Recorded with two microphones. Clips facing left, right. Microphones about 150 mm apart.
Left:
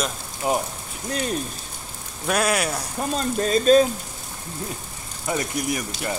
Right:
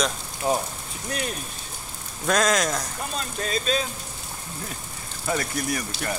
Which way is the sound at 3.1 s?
40° left (ahead or behind).